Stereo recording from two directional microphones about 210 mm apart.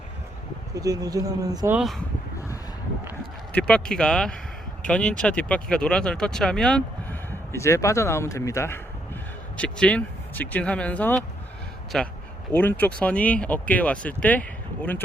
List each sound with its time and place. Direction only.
0.7 s speech: 15° right (ahead or behind)
3.5 s speech: 5° left (ahead or behind)